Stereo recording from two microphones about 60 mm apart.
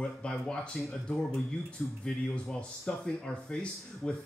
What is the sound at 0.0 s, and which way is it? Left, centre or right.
Speech, centre.